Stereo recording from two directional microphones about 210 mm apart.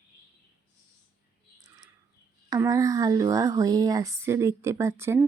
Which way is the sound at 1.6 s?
15° right (ahead or behind).